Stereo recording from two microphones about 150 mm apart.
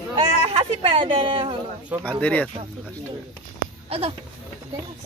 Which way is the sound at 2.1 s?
10° left (ahead or behind).